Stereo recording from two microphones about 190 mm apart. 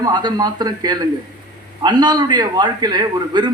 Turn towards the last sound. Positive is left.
turn(degrees=-25)  # may be behind; listen again after turning